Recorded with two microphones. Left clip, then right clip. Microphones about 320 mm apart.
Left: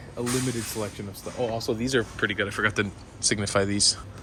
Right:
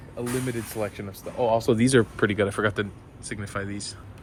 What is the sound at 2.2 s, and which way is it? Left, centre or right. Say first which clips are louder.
Speech: right 2 dB; centre.